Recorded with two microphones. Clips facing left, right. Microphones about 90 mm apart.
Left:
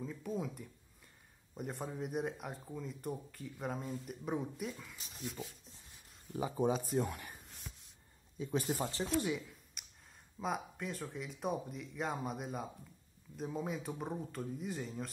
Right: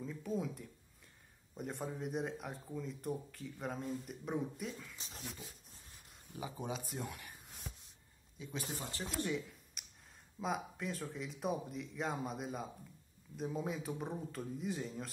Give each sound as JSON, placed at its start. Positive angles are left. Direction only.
{"t": 0.0, "sound": "speech", "side_deg": 0}
{"t": 4.9, "sound": "speech", "side_deg": -30}
{"t": 6.3, "sound": "speech", "side_deg": 40}
{"t": 8.5, "sound": "speech", "side_deg": 40}
{"t": 9.2, "sound": "a sound", "side_deg": 0}
{"t": 10.4, "sound": "speech", "side_deg": 0}